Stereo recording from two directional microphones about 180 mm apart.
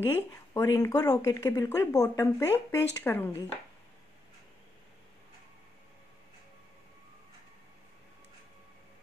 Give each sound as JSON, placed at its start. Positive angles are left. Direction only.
{"t": 0.0, "sound": "speech", "side_deg": 10}